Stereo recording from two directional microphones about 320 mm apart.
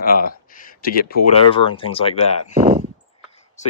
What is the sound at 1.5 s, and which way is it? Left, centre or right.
Speech, centre.